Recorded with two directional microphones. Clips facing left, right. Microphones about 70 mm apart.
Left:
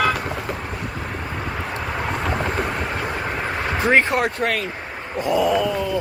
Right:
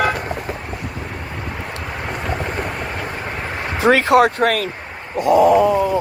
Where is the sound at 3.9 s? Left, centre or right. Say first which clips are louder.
Right 5 dB; right.